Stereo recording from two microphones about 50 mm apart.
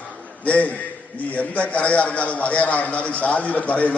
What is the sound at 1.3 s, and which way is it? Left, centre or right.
A man's voice, left.